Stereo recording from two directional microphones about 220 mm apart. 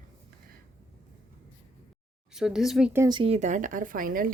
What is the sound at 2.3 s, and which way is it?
Speech, centre (ahead or behind).